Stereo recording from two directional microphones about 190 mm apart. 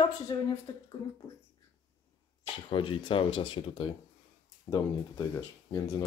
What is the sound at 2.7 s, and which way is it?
Speech, 25° left (ahead or behind).